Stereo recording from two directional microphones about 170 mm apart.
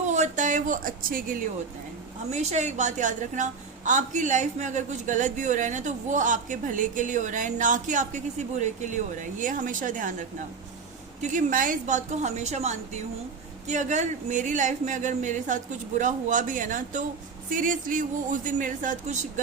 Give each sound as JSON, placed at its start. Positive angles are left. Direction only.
{"t": 0.0, "sound": "speech", "side_deg": -45}
{"t": 2.3, "sound": "a woman's voice", "side_deg": -40}
{"t": 11.2, "sound": "a woman's voice", "side_deg": -45}